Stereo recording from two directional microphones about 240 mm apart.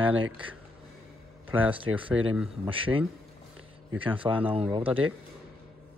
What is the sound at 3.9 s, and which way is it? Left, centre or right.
Speech, right.